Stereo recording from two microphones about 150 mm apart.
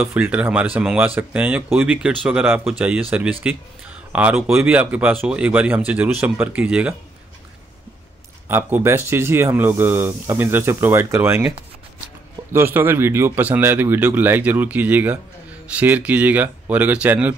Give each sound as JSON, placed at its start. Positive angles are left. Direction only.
{"t": 0.0, "sound": "speech", "side_deg": -10}
{"t": 8.5, "sound": "speech", "side_deg": -15}
{"t": 12.5, "sound": "speech", "side_deg": -15}